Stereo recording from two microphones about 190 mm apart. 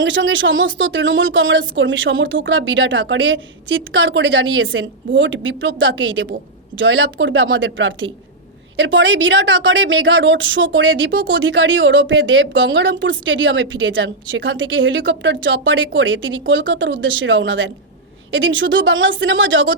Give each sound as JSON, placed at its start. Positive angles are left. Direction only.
{"t": 0.0, "sound": "a woman's voice", "side_deg": -75}